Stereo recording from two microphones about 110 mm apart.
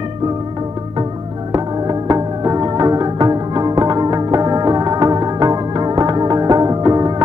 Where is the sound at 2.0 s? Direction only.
40° right (ahead or behind).